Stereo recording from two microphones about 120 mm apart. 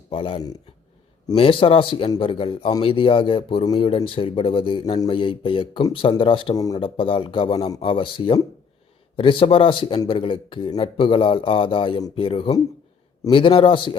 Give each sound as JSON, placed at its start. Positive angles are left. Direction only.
{"t": 0.1, "sound": "speech", "side_deg": 50}
{"t": 7.8, "sound": "speech", "side_deg": 45}